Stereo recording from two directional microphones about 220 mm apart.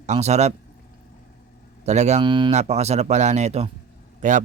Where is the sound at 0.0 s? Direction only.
30° right (ahead or behind).